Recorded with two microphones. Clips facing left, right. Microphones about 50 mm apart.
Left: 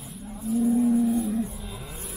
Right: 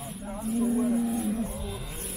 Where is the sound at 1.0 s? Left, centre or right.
Centre.